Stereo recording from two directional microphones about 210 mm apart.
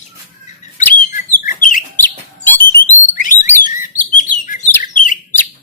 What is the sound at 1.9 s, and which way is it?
Bird, 10° left (ahead or behind).